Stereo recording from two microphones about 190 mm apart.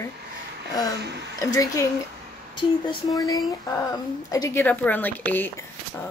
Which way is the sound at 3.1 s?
20° left (ahead or behind).